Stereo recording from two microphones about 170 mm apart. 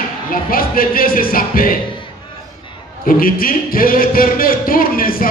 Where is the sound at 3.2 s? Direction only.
55° left (ahead or behind).